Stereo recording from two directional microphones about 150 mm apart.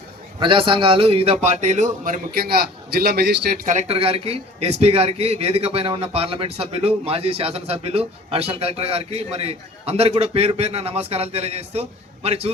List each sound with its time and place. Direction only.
0.3 s a man's voice: 35° right (ahead or behind); by 2.2 s 55° right (ahead or behind)
2.9 s a man's voice: 90° right
3.8 s a man's voice: 40° right (ahead or behind)